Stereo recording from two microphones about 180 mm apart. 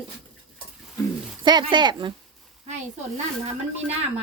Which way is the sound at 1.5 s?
25° right (ahead or behind).